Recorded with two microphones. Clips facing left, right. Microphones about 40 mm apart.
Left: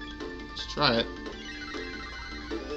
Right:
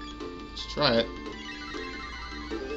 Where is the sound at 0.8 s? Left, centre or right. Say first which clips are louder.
Right 1 dB; centre.